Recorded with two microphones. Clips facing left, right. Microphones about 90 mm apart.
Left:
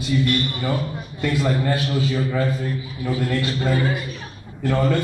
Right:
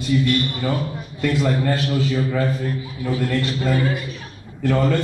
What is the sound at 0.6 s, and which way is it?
A man's voice, 5° left (ahead or behind).